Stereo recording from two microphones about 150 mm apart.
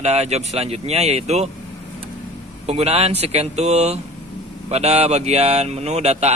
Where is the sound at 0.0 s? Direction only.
45° right (ahead or behind).